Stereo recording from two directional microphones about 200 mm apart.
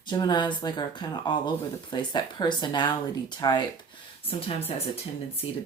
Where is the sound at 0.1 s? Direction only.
20° left (ahead or behind).